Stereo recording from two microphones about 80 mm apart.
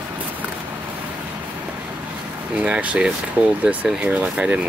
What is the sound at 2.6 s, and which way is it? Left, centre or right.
Speech, centre.